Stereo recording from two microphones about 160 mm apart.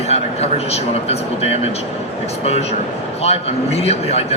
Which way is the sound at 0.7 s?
40° left (ahead or behind).